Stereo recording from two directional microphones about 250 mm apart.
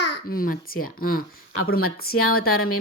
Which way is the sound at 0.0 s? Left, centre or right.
Left.